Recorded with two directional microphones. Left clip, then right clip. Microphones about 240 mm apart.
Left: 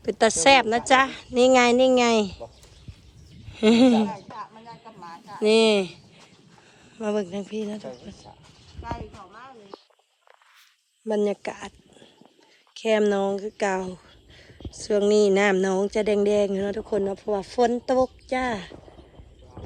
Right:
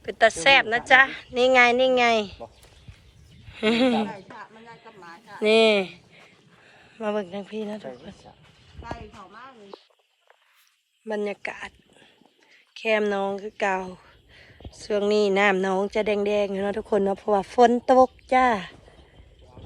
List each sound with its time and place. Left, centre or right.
0.0 s a woman's voice: centre
3.5 s speech: centre
4.1 s a sound: right
5.4 s a woman's voice: centre
11.0 s speech: centre